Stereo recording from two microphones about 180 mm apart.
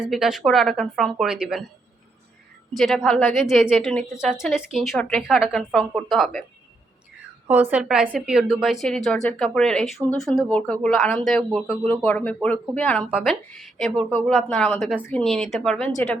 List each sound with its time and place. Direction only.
0.0 s a woman's voice: centre (ahead or behind)
2.7 s a woman's voice: centre (ahead or behind)
7.4 s a woman's voice: 10° right (ahead or behind); by 13.1 s 10° left (ahead or behind)
13.1 s a woman's voice: 5° right (ahead or behind)